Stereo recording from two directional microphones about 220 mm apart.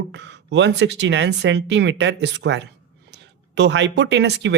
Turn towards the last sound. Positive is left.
turn(degrees=-50)  # may be behind; listen again after turning